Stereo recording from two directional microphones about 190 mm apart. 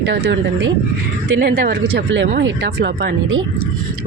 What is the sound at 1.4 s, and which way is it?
Speech, 55° right (ahead or behind).